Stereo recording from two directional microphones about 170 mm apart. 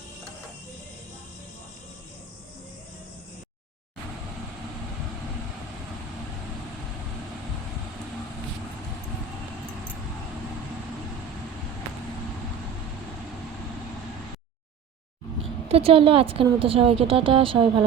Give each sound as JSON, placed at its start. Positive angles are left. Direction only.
{"t": 15.7, "sound": "a woman's voice", "side_deg": -35}